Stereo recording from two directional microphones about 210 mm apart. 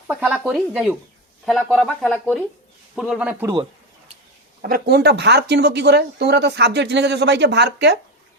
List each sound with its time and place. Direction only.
0.1 s speech: 5° right (ahead or behind)
4.7 s speech: 50° right (ahead or behind)